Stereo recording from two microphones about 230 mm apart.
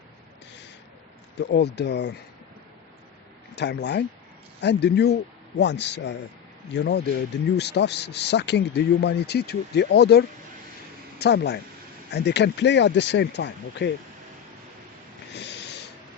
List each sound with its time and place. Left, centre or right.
1.4 s a man's voice: left
3.5 s a man's voice: left
15.3 s snort: left